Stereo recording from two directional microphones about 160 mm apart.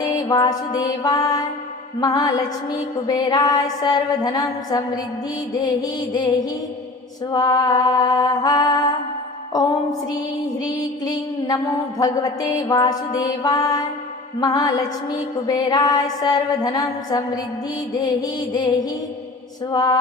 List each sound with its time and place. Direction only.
0.0 s music: 25° left (ahead or behind)